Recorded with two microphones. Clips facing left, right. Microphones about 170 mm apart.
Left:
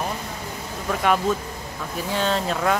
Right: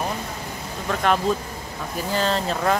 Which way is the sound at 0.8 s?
5° left (ahead or behind).